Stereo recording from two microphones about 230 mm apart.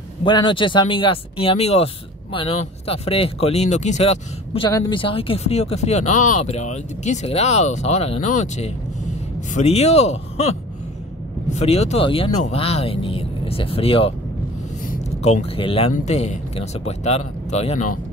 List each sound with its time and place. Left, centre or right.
0.2 s speech: centre